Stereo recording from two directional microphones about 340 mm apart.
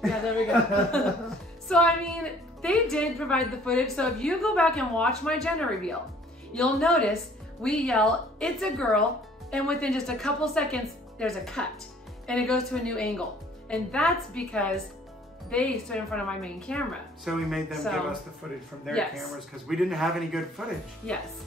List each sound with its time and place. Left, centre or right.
0.0 s a man's voice: centre